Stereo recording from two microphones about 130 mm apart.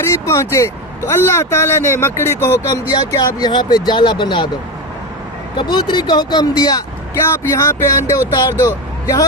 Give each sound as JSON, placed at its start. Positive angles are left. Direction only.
{"t": 0.3, "sound": "speech", "side_deg": 20}
{"t": 2.9, "sound": "speech", "side_deg": 30}
{"t": 5.5, "sound": "speech", "side_deg": 40}
{"t": 7.1, "sound": "speech", "side_deg": 20}